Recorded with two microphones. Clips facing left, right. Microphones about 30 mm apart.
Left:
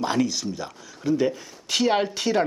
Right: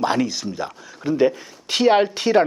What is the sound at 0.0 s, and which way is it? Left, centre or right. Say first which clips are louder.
Speech: right 3 dB; centre.